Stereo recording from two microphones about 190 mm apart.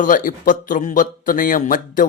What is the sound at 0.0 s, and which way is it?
Speech, 45° left (ahead or behind).